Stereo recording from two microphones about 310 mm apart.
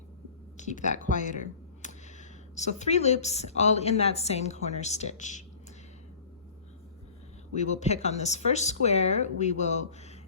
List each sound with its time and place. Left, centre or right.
0.5 s speech: left
7.5 s speech: left